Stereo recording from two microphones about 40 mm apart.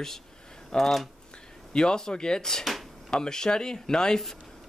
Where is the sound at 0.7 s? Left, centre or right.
Centre.